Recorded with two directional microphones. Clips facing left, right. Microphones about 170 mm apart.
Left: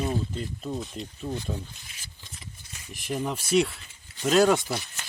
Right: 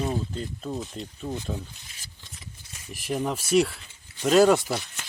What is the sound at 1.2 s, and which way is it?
Speech, 15° right (ahead or behind).